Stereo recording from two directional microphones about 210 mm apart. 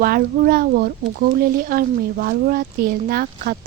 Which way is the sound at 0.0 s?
45° right (ahead or behind).